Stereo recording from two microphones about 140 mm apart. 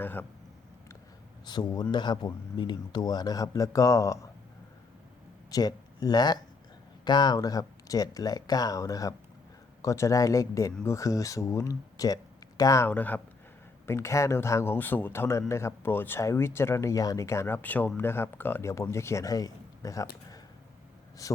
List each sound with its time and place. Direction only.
0.0 s speech: 15° left (ahead or behind)
1.5 s speech: 30° left (ahead or behind)
5.5 s speech: 25° left (ahead or behind)
12.9 s speech: 10° left (ahead or behind)
21.2 s speech: 25° left (ahead or behind)